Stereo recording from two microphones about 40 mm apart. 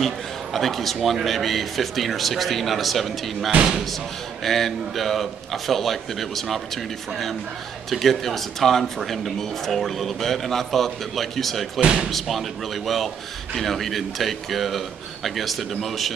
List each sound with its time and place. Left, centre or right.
0.0 s speech: centre
11.8 s speech: right
12.1 s speech: centre